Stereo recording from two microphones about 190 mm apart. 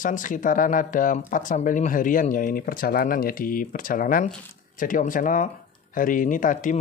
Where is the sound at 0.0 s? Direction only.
45° left (ahead or behind).